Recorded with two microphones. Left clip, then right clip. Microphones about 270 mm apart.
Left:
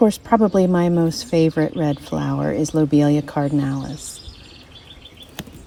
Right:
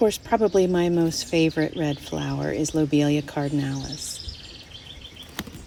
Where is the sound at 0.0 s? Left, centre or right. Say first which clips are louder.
Left 4 dB; left.